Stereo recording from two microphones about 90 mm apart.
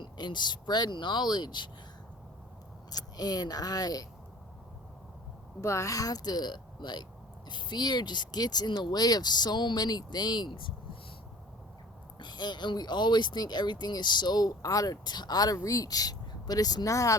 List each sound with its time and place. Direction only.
0.0 s speech: 55° left (ahead or behind)
2.9 s speech: 45° left (ahead or behind)
5.5 s speech: 35° left (ahead or behind); by 10.7 s 60° left (ahead or behind)
12.2 s speech: 55° left (ahead or behind); by 17.2 s 40° left (ahead or behind)